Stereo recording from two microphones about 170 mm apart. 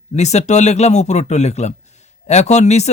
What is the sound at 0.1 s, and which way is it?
Speech, 40° left (ahead or behind).